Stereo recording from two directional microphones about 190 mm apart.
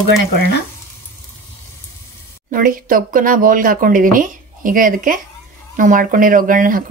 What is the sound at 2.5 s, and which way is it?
Speech, 45° right (ahead or behind).